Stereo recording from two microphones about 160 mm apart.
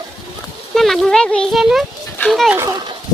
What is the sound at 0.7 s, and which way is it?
A child's voice, centre (ahead or behind).